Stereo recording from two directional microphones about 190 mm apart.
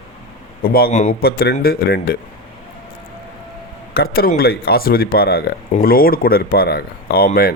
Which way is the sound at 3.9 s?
55° left (ahead or behind).